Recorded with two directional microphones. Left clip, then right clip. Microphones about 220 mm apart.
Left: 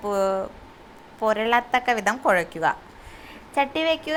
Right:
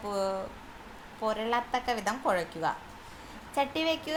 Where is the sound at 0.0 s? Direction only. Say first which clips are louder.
Left 8 dB; 30° left (ahead or behind).